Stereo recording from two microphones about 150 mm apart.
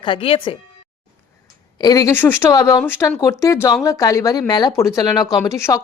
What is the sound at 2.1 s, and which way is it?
Speech, 15° left (ahead or behind).